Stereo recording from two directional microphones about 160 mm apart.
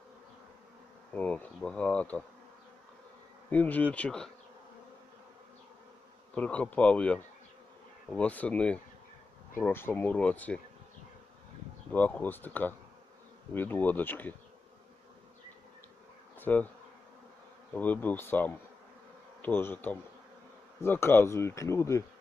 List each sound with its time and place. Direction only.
1.1 s speech: 10° left (ahead or behind)
3.5 s speech: 10° left (ahead or behind)
3.9 s bee: 5° left (ahead or behind)
6.3 s speech: 10° left (ahead or behind)
11.9 s speech: 10° left (ahead or behind)
16.4 s bee: 10° left (ahead or behind)
17.7 s speech: 10° left (ahead or behind)